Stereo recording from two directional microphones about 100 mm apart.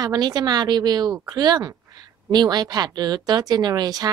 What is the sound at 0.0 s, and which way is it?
A woman's voice, 40° right (ahead or behind).